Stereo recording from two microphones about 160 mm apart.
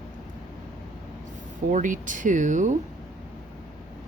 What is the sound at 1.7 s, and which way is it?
Speech, 55° right (ahead or behind).